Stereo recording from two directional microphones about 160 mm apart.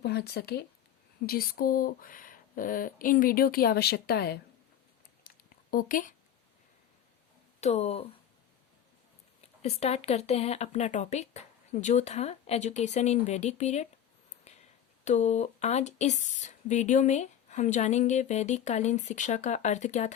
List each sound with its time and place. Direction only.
0.0 s speech: 90° left
1.3 s speech: 65° left (ahead or behind)
5.2 s a sound: 60° left (ahead or behind)
7.6 s speech: 45° left (ahead or behind)
9.4 s speech: 40° left (ahead or behind)
14.5 s a sound: 45° left (ahead or behind)
15.0 s speech: 45° left (ahead or behind)